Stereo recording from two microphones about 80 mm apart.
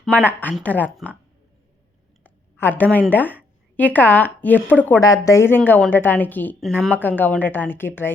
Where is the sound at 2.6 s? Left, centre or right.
Left.